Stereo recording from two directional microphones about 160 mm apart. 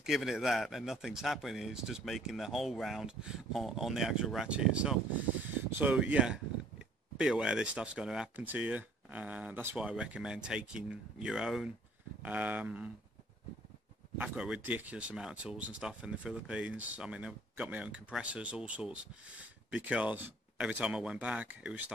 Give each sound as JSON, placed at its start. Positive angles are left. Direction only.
{"t": 0.0, "sound": "speech", "side_deg": 0}
{"t": 14.1, "sound": "speech", "side_deg": -10}